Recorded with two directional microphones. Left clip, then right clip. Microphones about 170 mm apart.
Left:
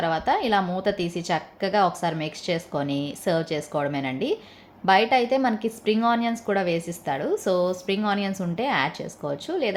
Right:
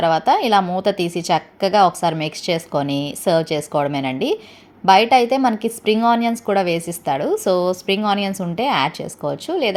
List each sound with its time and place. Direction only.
0.0 s a woman's voice: 30° right (ahead or behind)